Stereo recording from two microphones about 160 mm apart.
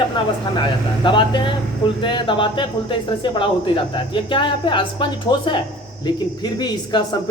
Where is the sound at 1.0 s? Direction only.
30° left (ahead or behind).